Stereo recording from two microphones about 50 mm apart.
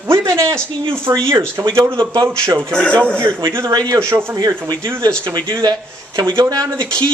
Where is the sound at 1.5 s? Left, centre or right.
Right.